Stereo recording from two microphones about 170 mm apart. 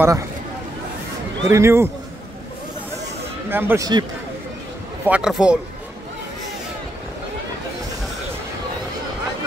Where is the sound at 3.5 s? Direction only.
15° right (ahead or behind).